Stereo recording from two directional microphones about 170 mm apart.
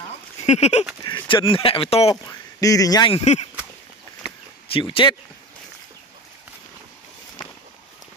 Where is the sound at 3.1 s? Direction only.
40° left (ahead or behind).